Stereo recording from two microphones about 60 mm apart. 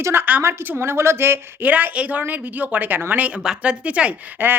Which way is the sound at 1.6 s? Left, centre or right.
Right.